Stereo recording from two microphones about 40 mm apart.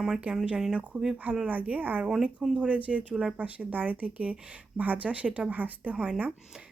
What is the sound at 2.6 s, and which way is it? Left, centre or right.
Speech, right.